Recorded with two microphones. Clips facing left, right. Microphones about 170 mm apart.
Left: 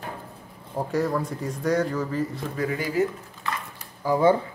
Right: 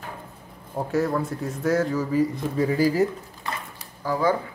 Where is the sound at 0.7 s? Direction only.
Centre (ahead or behind).